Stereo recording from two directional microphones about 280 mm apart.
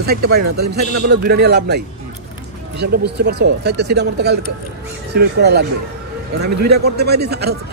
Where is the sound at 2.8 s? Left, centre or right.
Right.